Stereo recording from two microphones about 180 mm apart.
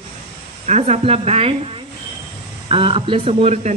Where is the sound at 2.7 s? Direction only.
30° right (ahead or behind).